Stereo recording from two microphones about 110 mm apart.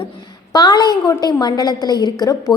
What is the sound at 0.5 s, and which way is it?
A woman's voice, 40° left (ahead or behind).